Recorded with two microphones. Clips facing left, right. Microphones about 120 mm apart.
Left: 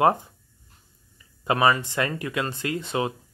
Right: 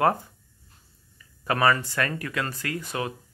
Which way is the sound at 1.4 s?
20° left (ahead or behind).